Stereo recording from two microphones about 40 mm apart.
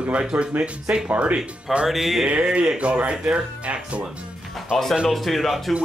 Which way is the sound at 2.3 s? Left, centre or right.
Right.